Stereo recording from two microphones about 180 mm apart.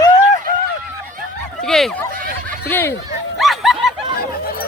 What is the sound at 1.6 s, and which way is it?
Speech, centre (ahead or behind).